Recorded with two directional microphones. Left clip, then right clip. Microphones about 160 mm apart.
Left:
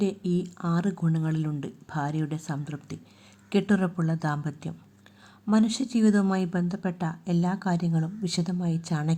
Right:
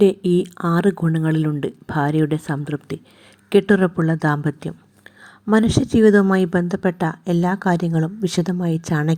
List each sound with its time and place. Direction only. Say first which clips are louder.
0.0 s speech: right 13 dB; 40° right (ahead or behind)